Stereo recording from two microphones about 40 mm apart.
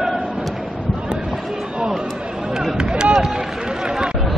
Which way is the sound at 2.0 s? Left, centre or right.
Centre.